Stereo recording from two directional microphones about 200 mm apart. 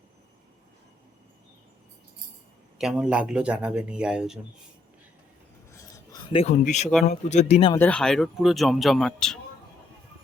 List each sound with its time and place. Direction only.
2.7 s speech: 5° right (ahead or behind)
6.3 s speech: 35° left (ahead or behind)
7.7 s speech: 10° left (ahead or behind)